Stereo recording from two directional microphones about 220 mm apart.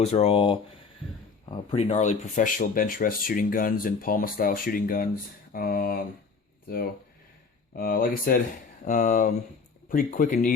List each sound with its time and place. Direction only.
0.0 s speech: 30° left (ahead or behind)
7.8 s speech: 40° left (ahead or behind)